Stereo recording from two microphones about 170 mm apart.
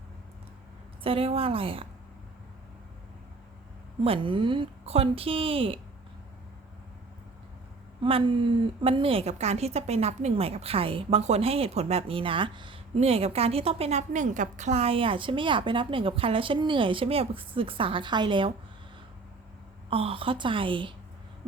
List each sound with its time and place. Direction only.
1.0 s a woman's voice: 35° right (ahead or behind)
4.0 s a woman's voice: 30° right (ahead or behind)
8.0 s a woman's voice: 35° right (ahead or behind)
19.9 s a woman's voice: 35° right (ahead or behind)